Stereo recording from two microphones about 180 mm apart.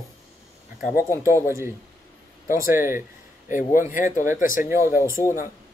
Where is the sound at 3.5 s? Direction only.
45° left (ahead or behind).